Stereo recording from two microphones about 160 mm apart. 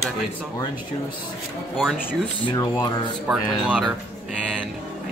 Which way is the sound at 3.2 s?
5° right (ahead or behind).